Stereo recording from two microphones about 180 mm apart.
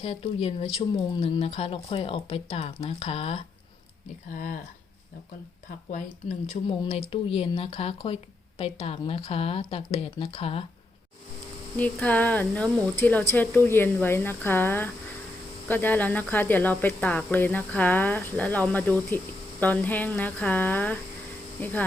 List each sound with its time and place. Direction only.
0.0 s speech: 35° left (ahead or behind)
4.3 s speech: 50° left (ahead or behind)
6.5 s speech: 35° left (ahead or behind)
11.8 s speech: 5° left (ahead or behind)